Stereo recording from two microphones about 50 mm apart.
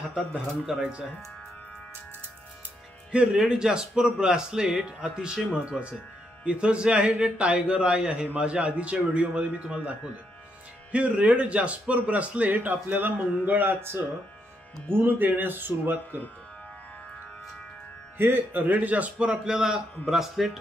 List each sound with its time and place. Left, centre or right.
3.1 s a man's voice: right
15.0 s a man's voice: right
18.1 s a man's voice: right; by 20.5 s centre